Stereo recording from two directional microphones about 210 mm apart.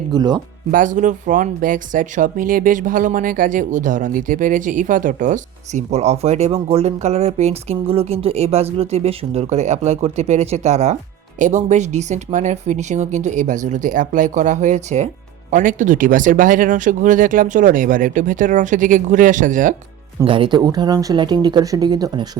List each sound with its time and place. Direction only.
0.1 s speech: 20° right (ahead or behind)
0.7 s speech: 40° right (ahead or behind)
20.2 s speech: 25° right (ahead or behind)